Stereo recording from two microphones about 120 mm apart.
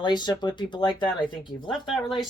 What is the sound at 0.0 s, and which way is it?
Speech, 40° left (ahead or behind).